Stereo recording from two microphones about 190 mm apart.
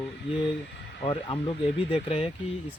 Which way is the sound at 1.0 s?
25° left (ahead or behind).